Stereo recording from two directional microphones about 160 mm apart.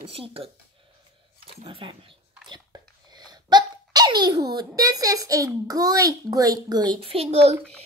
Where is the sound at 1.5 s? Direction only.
35° right (ahead or behind).